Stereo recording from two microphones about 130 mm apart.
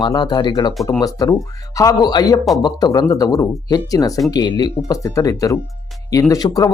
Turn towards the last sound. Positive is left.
turn(degrees=30)  # may be behind; listen again after turning